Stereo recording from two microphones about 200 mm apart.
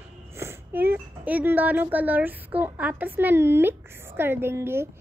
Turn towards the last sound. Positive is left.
turn(degrees=-10)  # may be behind; listen again after turning